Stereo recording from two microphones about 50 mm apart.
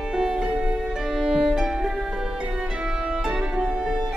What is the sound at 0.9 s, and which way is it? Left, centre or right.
Music, centre.